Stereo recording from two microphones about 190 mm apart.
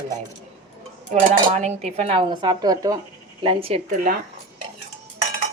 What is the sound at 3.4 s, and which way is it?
Speech, 30° right (ahead or behind).